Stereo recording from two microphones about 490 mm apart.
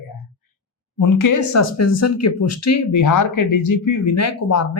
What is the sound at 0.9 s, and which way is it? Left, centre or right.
A woman's voice, left.